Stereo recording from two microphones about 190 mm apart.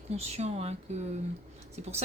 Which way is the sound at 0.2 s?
35° right (ahead or behind).